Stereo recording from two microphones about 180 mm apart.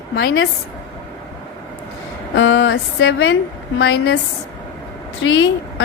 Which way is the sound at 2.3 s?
90° left.